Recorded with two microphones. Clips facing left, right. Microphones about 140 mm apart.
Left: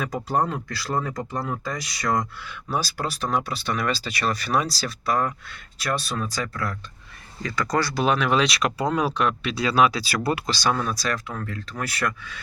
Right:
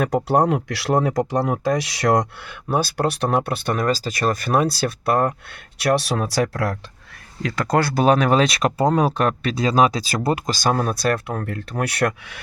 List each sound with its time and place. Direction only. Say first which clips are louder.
0.3 s speech: right 4 dB; 80° right
7.4 s speech: right 4 dB; 60° right (ahead or behind)